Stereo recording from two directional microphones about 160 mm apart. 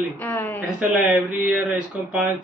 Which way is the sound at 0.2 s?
15° left (ahead or behind).